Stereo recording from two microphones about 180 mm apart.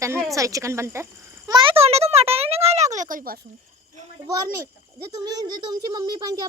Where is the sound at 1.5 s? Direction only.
30° right (ahead or behind); by 3.3 s 50° right (ahead or behind).